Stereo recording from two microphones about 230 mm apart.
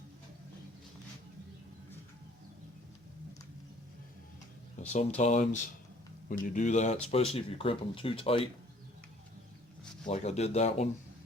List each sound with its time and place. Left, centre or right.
4.9 s speech: left
10.1 s speech: left